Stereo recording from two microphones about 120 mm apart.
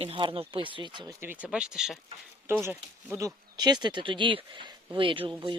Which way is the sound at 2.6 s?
25° right (ahead or behind).